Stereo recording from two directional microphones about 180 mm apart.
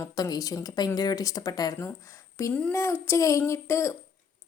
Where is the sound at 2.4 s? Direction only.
5° left (ahead or behind).